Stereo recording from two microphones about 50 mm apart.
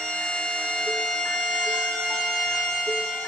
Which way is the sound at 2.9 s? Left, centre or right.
Centre.